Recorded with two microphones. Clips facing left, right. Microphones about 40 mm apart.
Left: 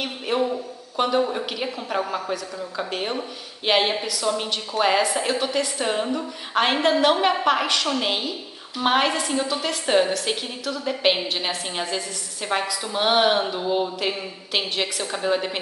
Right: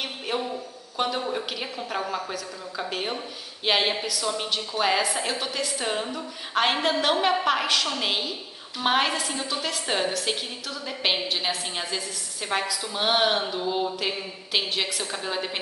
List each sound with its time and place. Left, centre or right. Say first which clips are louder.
0.0 s a man's voice: left 5 dB; centre